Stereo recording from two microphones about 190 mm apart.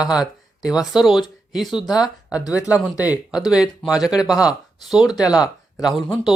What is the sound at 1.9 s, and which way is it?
Speech, 20° left (ahead or behind).